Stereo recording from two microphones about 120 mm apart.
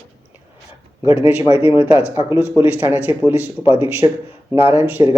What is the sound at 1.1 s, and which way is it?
Speech, 15° right (ahead or behind).